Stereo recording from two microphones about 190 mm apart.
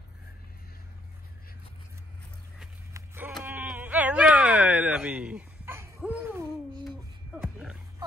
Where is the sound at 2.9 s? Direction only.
10° right (ahead or behind).